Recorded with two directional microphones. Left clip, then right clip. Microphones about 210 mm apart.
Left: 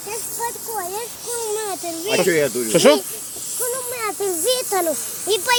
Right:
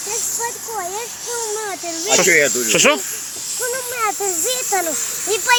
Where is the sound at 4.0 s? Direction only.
30° left (ahead or behind).